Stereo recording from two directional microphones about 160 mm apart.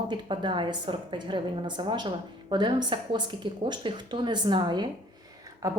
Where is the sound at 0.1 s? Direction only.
30° right (ahead or behind).